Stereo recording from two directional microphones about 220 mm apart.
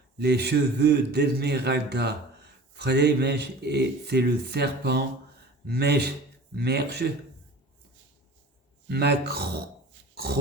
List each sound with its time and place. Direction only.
0.2 s a man's voice: 50° right (ahead or behind)
8.9 s a man's voice: 45° right (ahead or behind)